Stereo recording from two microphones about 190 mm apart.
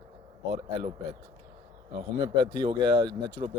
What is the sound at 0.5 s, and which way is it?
A man's voice, 30° right (ahead or behind).